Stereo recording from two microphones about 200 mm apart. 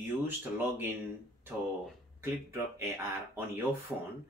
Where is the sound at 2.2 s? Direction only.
15° right (ahead or behind).